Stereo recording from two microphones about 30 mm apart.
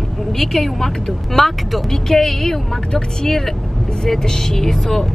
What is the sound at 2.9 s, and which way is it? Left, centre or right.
Speech, left.